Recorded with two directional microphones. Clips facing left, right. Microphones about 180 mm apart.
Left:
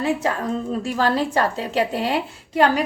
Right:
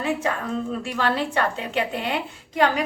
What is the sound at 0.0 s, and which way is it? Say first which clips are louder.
Speech: left 3 dB; 35° left (ahead or behind).